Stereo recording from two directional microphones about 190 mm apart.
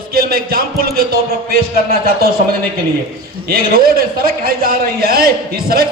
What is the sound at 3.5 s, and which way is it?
A man's voice, 50° right (ahead or behind).